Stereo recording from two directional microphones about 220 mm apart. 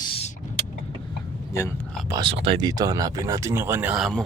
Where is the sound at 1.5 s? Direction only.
15° left (ahead or behind).